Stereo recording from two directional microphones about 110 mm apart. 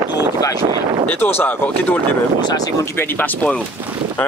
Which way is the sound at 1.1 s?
20° left (ahead or behind).